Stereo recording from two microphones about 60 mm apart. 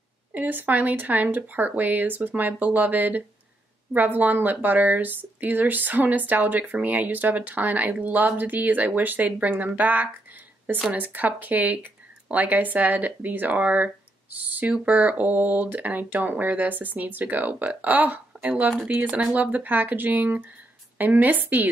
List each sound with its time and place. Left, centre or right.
0.3 s a woman's voice: right